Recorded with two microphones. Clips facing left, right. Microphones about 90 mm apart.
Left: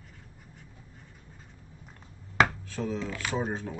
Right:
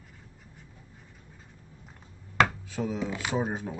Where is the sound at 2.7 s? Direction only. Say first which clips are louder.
Right 1 dB; 10° right (ahead or behind).